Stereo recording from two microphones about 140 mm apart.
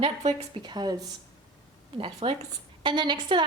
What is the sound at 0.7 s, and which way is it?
Speech, 30° right (ahead or behind).